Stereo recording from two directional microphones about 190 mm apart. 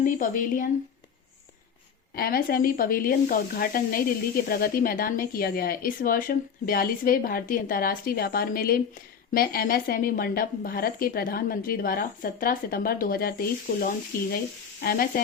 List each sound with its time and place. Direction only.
0.0 s speech: 45° left (ahead or behind)
2.1 s speech: 50° left (ahead or behind)